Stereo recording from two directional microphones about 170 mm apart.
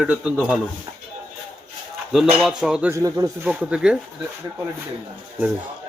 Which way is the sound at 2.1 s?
5° right (ahead or behind).